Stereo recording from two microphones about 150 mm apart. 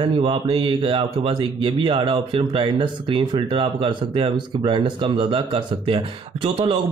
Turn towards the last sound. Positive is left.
turn(degrees=-30)  # may be behind; listen again after turning